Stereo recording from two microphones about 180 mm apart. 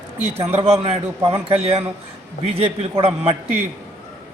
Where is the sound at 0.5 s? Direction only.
35° right (ahead or behind).